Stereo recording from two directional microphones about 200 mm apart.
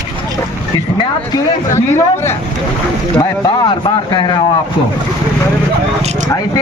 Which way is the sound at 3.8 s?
20° left (ahead or behind).